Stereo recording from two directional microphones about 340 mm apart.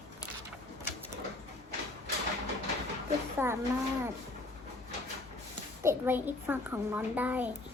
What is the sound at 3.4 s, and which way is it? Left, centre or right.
Speech, centre.